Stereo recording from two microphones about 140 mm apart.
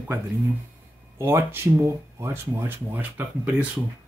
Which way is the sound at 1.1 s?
15° right (ahead or behind).